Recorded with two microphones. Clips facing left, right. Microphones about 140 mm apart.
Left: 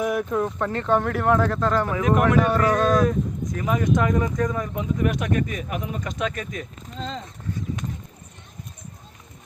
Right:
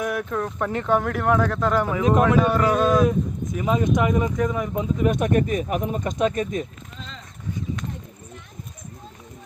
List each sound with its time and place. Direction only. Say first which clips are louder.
0.0 s speech: left 2 dB; 5° left (ahead or behind)
0.7 s speech: right 2 dB; 5° right (ahead or behind)
2.0 s speech: right 1 dB; 25° right (ahead or behind)
2.4 s speech: right 1 dB; 10° right (ahead or behind)
4.7 s speech: right 2 dB; 25° right (ahead or behind)
5.2 s speech: right 4 dB; 40° right (ahead or behind)